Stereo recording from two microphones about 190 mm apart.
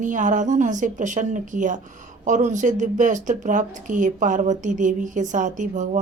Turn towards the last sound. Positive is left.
turn(degrees=-40)  # may be behind; listen again after turning